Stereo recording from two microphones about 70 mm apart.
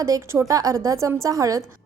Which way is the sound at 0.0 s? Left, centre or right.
Right.